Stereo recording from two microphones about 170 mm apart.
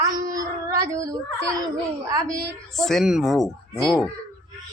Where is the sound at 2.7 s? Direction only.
Centre (ahead or behind).